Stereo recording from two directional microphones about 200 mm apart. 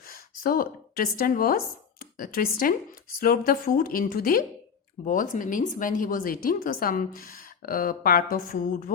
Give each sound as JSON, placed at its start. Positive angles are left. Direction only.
{"t": 0.0, "sound": "speech", "side_deg": 45}